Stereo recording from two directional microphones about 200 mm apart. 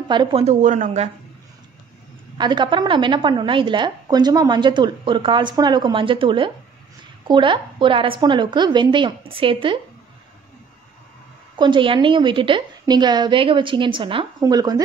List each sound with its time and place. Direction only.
0.1 s a woman's voice: 25° right (ahead or behind)
2.3 s a woman's voice: 20° right (ahead or behind)
11.5 s a woman's voice: 25° right (ahead or behind)